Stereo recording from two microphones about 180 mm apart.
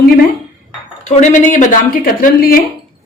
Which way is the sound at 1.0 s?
45° left (ahead or behind).